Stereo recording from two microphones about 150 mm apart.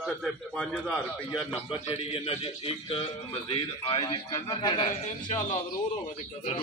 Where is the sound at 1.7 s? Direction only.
40° left (ahead or behind).